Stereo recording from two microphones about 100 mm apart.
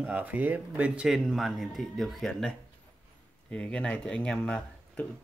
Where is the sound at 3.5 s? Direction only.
10° left (ahead or behind).